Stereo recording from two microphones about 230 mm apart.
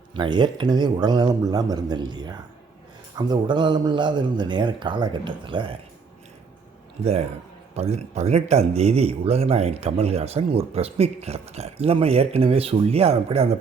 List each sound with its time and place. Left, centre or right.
0.1 s speech: right
7.0 s speech: right